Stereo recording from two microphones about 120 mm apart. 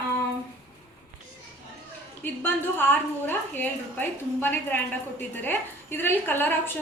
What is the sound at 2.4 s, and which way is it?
A woman's voice, 15° left (ahead or behind).